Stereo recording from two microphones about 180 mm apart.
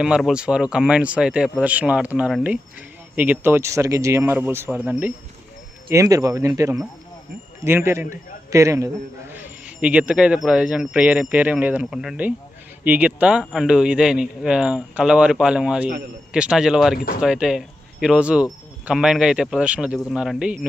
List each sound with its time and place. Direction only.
0.0 s speech: 5° right (ahead or behind)